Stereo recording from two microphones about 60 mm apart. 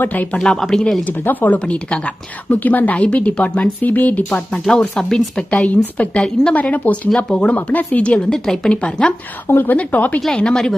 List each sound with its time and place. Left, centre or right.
0.0 s a woman's voice: left
0.3 s a woman's voice: centre
1.0 s a woman's voice: left
4.9 s a woman's voice: centre
5.4 s a woman's voice: left
8.3 s a woman's voice: centre
8.7 s speech: centre
9.5 s a woman's voice: left
9.7 s a woman's voice: left
10.2 s speech: centre